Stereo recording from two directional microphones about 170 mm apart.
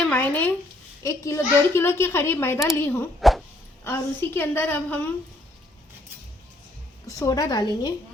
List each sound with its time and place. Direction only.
0.0 s a child's voice: 10° left (ahead or behind)
3.2 s a sound: centre (ahead or behind)
3.8 s a child's voice: 15° left (ahead or behind)
7.1 s a woman's voice: 20° left (ahead or behind)